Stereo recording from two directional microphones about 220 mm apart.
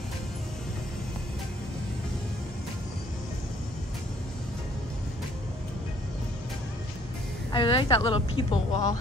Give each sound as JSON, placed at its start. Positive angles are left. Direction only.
{"t": 7.5, "sound": "a woman's voice", "side_deg": 20}